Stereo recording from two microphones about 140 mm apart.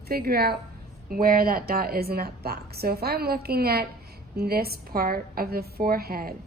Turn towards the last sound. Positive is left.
turn(degrees=-90)